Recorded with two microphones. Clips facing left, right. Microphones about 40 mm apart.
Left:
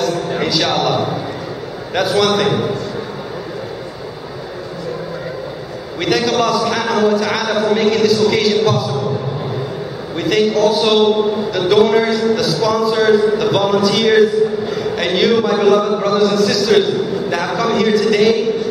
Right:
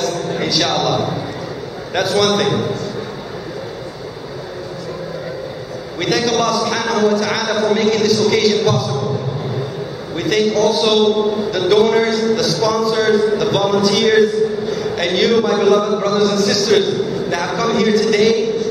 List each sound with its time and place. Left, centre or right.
0.0 s a sound: centre
2.0 s a man's voice: centre
5.9 s a man's voice: centre
10.1 s a man's voice: centre